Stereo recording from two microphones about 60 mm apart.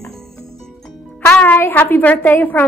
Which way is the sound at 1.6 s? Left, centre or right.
Left.